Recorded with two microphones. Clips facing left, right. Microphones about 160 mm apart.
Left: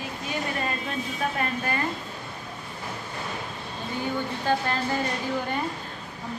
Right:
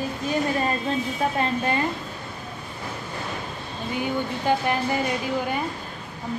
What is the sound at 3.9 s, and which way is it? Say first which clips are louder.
Speech: right 3 dB; 15° right (ahead or behind).